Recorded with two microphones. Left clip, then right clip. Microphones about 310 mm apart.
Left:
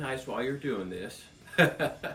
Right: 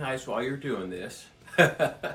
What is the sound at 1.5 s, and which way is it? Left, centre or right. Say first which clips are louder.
Speech: right 3 dB; centre.